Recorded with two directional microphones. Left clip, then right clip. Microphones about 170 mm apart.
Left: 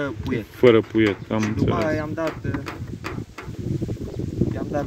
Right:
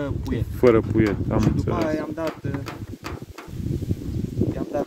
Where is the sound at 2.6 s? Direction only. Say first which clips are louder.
Left 2 dB; 50° right (ahead or behind).